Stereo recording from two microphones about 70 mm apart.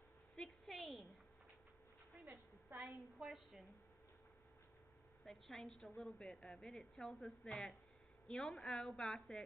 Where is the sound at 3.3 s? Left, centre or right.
Centre.